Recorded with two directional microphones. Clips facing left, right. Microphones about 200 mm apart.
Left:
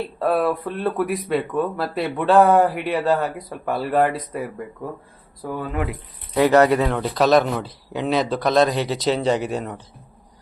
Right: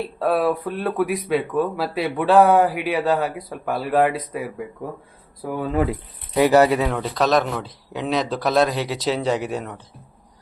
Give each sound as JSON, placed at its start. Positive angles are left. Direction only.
{"t": 0.2, "sound": "speech", "side_deg": 0}
{"t": 5.7, "sound": "speech", "side_deg": -30}
{"t": 6.3, "sound": "speech", "side_deg": -10}